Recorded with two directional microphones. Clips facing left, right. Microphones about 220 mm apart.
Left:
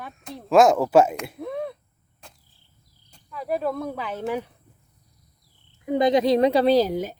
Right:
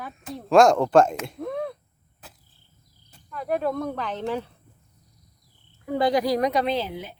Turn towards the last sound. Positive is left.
turn(degrees=40)  # may be behind; listen again after turning